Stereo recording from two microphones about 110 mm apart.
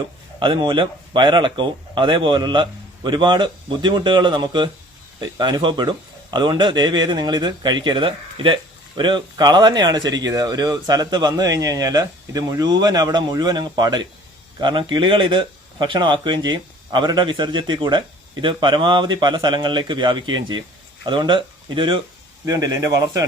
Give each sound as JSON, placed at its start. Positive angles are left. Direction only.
{"t": 0.3, "sound": "speech", "side_deg": -45}
{"t": 22.4, "sound": "speech", "side_deg": -35}